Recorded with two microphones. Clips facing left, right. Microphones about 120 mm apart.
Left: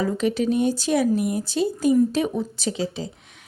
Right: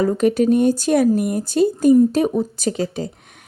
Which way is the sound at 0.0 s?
50° right (ahead or behind).